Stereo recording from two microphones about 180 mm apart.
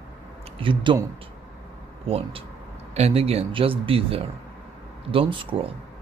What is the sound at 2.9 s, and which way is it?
A man's voice, 35° right (ahead or behind).